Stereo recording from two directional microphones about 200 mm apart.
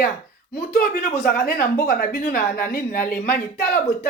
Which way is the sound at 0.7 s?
35° left (ahead or behind).